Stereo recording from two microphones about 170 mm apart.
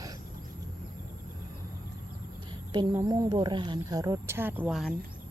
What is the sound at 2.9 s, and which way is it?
Speech, 20° right (ahead or behind).